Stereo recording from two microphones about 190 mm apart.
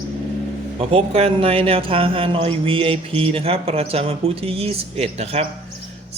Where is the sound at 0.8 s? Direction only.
30° right (ahead or behind).